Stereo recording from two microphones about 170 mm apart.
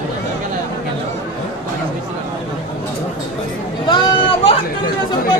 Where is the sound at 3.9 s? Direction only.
30° left (ahead or behind).